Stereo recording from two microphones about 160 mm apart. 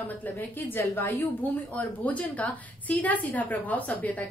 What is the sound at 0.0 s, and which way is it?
A woman's voice, 10° left (ahead or behind).